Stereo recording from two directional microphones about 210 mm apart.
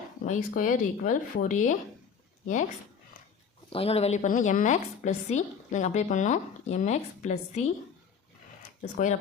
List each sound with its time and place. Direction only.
0.3 s a woman's voice: 40° left (ahead or behind)
3.7 s a woman's voice: 30° left (ahead or behind)
8.8 s a woman's voice: 35° left (ahead or behind)